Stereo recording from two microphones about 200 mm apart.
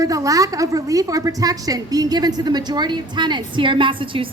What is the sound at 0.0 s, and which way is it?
A woman's voice, 15° right (ahead or behind).